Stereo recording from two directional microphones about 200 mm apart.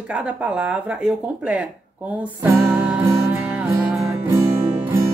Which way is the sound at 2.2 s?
10° right (ahead or behind).